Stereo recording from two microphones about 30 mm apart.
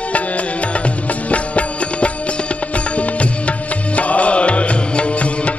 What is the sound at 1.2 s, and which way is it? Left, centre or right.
Music, left.